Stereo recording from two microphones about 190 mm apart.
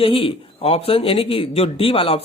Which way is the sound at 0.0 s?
30° left (ahead or behind).